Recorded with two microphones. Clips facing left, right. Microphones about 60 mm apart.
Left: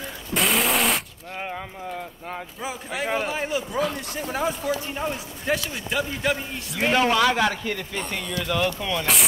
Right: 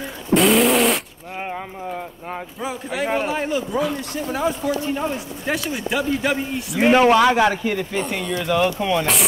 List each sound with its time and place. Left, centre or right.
0.3 s vehicle: centre
2.6 s speech: centre
6.8 s speech: centre